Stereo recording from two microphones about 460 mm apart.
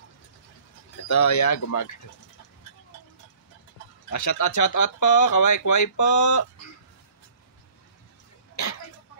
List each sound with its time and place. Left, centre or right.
1.0 s speech: left
4.1 s speech: left